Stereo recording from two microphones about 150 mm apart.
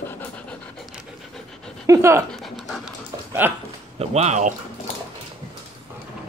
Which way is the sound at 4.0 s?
45° right (ahead or behind).